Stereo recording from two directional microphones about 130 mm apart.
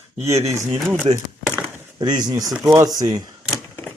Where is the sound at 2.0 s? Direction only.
30° right (ahead or behind).